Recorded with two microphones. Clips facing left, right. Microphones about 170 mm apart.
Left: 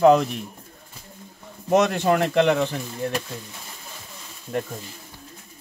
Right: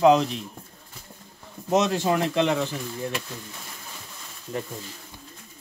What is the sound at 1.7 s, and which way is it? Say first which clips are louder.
Speech: left 3 dB; 60° left (ahead or behind).